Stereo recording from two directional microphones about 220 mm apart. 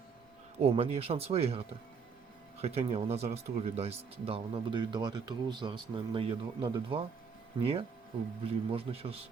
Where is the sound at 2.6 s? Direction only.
25° right (ahead or behind).